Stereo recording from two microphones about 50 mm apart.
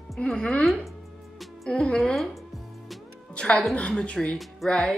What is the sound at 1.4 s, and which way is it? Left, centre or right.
Music, centre.